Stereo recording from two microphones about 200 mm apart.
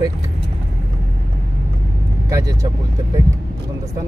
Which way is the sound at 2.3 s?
15° right (ahead or behind).